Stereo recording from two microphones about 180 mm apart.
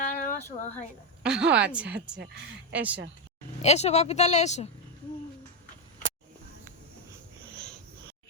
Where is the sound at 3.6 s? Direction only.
35° left (ahead or behind).